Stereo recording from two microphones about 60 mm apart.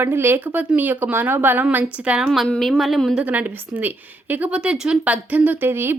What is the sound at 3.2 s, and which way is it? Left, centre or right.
A woman's voice, right.